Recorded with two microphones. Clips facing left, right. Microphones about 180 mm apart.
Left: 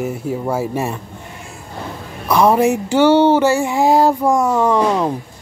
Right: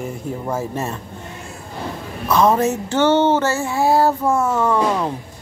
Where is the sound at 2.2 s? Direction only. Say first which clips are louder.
Left 3 dB; 10° left (ahead or behind).